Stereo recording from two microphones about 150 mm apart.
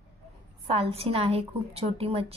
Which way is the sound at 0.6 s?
40° right (ahead or behind).